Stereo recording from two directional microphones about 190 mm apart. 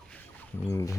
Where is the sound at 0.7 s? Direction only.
15° left (ahead or behind).